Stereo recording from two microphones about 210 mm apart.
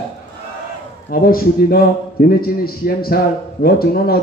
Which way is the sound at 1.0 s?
45° left (ahead or behind).